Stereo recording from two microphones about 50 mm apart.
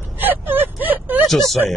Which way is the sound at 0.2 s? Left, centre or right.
Right.